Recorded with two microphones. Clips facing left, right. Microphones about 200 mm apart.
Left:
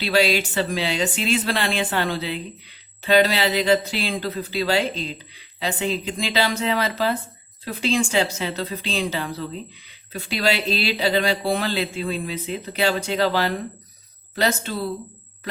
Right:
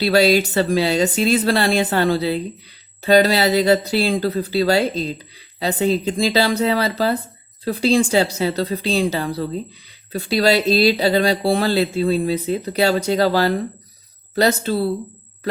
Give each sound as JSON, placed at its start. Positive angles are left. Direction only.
{"t": 0.0, "sound": "speech", "side_deg": -40}